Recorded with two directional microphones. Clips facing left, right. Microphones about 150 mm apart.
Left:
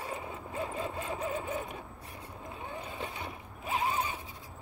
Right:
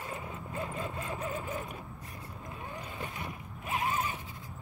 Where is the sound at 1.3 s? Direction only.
20° left (ahead or behind).